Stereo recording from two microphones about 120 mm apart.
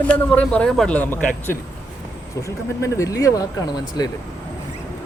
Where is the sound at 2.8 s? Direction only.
25° left (ahead or behind).